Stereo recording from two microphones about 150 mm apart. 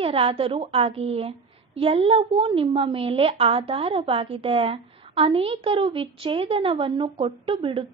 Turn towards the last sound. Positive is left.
turn(degrees=-35)  # may be behind; listen again after turning